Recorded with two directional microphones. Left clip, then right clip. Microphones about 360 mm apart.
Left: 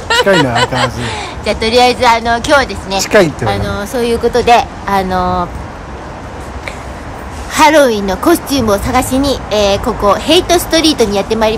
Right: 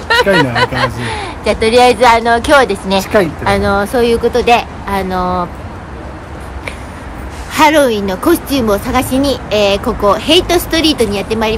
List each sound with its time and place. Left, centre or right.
0.1 s a woman's voice: centre
3.0 s speech: left
3.4 s a woman's voice: centre
7.5 s a woman's voice: centre